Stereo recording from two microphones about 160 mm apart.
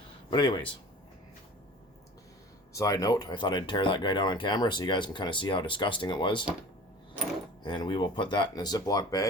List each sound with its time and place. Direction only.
0.3 s speech: 30° left (ahead or behind)
2.7 s speech: 20° left (ahead or behind)
7.6 s speech: 30° left (ahead or behind)